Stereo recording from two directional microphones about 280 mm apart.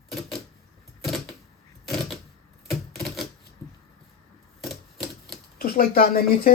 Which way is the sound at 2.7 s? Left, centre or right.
Centre.